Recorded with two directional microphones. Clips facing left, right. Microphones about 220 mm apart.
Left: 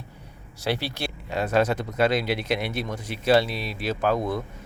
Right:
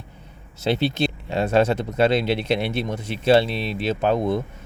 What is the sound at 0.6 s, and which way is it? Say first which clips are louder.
Speech: right 7 dB; 20° right (ahead or behind).